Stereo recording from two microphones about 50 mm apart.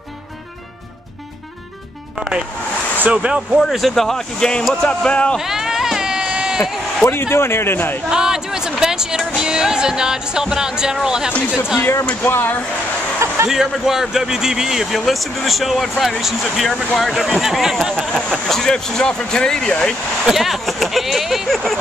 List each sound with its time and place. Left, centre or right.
3.0 s speech: right
3.7 s speech: centre; by 5.4 s left
5.4 s a sound: centre
7.1 s a man's voice: left
8.1 s speech: centre
11.8 s speech: left
12.1 s a man's voice: left
13.5 s speech: centre
18.5 s speech: centre
20.2 s speech: centre